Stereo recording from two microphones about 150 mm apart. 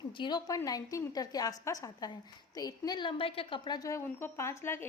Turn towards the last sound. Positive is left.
turn(degrees=15)  # may be behind; listen again after turning